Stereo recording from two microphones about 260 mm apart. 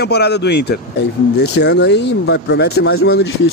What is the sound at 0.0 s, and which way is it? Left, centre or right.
Speech, left.